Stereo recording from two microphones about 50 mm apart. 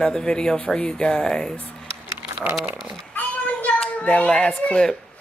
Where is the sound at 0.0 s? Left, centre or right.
Centre.